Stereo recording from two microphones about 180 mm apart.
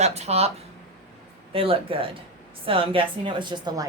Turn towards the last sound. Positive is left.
turn(degrees=-25)  # may be behind; listen again after turning